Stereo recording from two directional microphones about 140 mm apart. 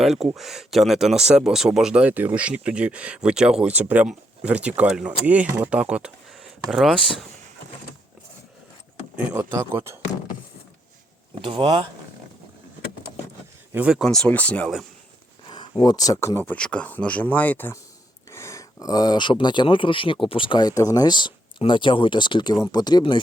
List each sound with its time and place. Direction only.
0.0 s speech: centre (ahead or behind)
9.1 s speech: 15° right (ahead or behind)
11.4 s speech: 40° right (ahead or behind)
13.7 s speech: 10° right (ahead or behind)
14.0 s speech: 5° left (ahead or behind)
15.4 s a sound: 35° left (ahead or behind)
15.8 s speech: 25° left (ahead or behind)